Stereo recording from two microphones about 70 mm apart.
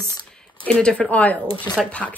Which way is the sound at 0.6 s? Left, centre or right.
Centre.